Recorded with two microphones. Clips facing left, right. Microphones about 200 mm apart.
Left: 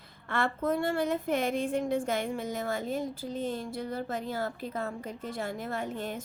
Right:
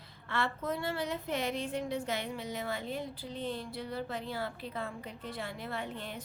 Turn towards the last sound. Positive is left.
turn(degrees=45)  # may be behind; listen again after turning